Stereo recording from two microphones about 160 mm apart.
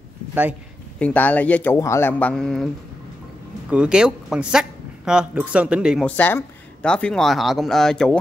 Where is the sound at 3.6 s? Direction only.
5° right (ahead or behind).